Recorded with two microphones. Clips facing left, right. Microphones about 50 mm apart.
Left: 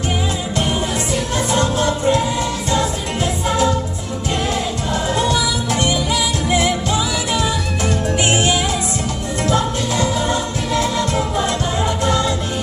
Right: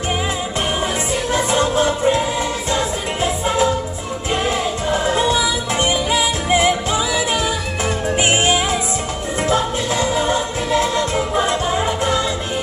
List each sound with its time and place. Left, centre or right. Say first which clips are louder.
1.1 s music: right 1 dB; centre
3.4 s music: even; right
5.0 s music: even; centre